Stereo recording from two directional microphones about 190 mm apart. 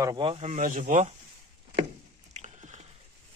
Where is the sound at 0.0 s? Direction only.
25° right (ahead or behind); by 1.1 s 45° right (ahead or behind).